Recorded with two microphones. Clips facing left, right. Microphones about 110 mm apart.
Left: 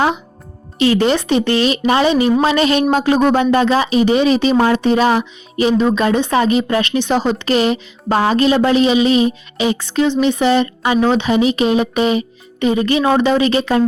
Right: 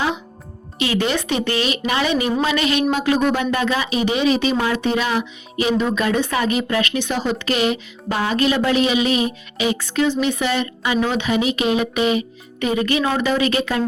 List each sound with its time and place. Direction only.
0.8 s speech: 35° left (ahead or behind)